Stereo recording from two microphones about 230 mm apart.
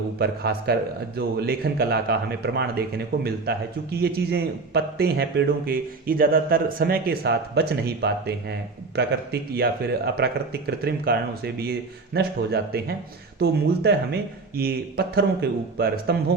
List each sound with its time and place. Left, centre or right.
0.2 s a man's voice: right